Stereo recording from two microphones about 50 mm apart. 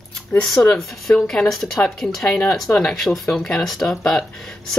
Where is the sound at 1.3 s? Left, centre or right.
Centre.